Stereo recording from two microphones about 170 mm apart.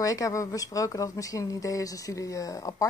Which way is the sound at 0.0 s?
20° left (ahead or behind).